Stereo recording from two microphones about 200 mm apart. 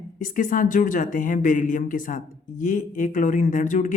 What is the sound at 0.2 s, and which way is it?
Speech, 40° left (ahead or behind).